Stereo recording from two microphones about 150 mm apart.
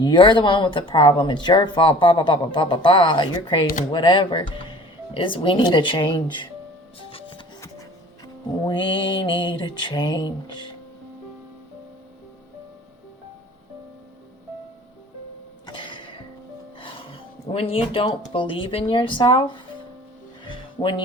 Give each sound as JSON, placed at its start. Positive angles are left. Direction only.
{"t": 0.0, "sound": "speech", "side_deg": 30}
{"t": 7.1, "sound": "music", "side_deg": 35}
{"t": 8.6, "sound": "speech", "side_deg": 35}
{"t": 15.6, "sound": "a sound", "side_deg": 30}
{"t": 16.8, "sound": "speech", "side_deg": 35}